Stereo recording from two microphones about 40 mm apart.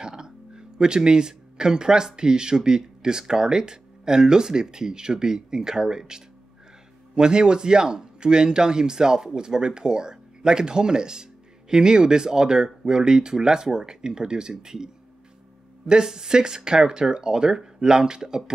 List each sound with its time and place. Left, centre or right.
0.0 s a sound: centre
2.1 s speech: centre
15.9 s speech: centre